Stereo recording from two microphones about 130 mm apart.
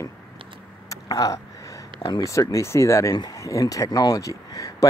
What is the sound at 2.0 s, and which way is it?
Speech, 30° left (ahead or behind).